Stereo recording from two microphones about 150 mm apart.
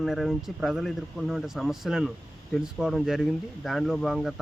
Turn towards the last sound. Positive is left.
turn(degrees=0)  # may be behind; listen again after turning